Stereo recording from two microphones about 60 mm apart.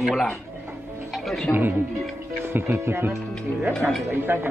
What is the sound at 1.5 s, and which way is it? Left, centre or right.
Speech, centre.